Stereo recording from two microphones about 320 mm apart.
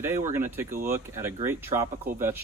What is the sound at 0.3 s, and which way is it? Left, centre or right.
Speech, centre.